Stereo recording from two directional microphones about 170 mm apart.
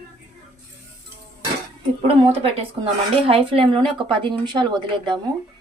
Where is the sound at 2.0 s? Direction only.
35° right (ahead or behind).